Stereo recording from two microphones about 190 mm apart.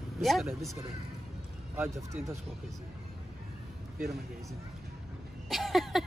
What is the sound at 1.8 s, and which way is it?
Speech, 15° right (ahead or behind).